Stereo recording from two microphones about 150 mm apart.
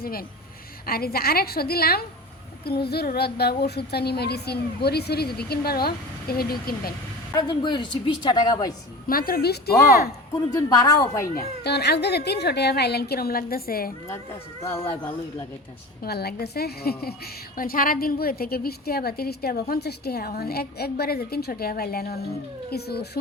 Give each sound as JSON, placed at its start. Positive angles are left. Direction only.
{"t": 0.0, "sound": "a woman's voice", "side_deg": 80}
{"t": 7.3, "sound": "a woman's voice", "side_deg": 30}
{"t": 9.0, "sound": "a woman's voice", "side_deg": 75}
{"t": 10.7, "sound": "a woman's voice", "side_deg": 25}
{"t": 11.6, "sound": "a woman's voice", "side_deg": 90}
{"t": 14.6, "sound": "a woman's voice", "side_deg": 20}
{"t": 16.0, "sound": "a woman's voice", "side_deg": 90}
{"t": 17.6, "sound": "a woman's voice", "side_deg": 70}